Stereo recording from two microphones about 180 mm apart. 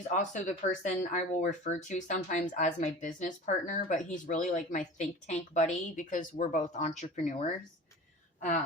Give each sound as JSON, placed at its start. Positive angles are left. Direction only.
{"t": 0.1, "sound": "a woman's voice", "side_deg": 45}